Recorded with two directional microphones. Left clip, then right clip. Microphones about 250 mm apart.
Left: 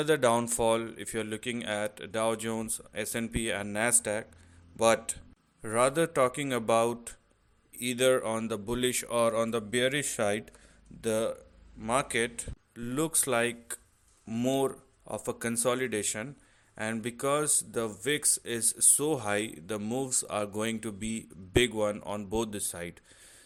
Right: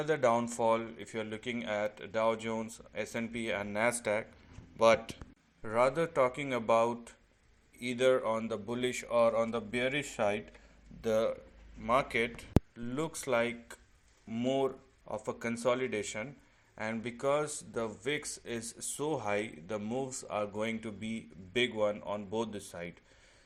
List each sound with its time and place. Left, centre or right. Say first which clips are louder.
0.0 s speech: left 3 dB; left